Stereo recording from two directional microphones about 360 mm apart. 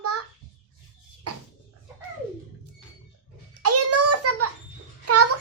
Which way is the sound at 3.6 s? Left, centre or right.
Right.